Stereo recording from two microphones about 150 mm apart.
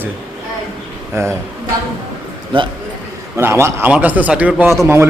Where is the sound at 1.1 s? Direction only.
20° right (ahead or behind).